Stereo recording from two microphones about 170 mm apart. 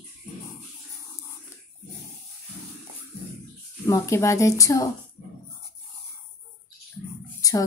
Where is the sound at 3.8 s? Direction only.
15° left (ahead or behind).